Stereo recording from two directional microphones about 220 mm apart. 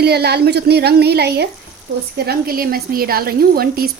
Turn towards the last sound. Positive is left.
turn(degrees=-45)  # may be behind; listen again after turning